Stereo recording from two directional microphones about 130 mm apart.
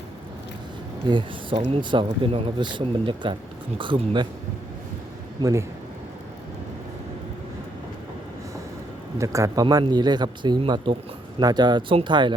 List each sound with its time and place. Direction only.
1.0 s speech: 35° right (ahead or behind)
5.4 s speech: 25° right (ahead or behind)
9.1 s speech: 25° right (ahead or behind)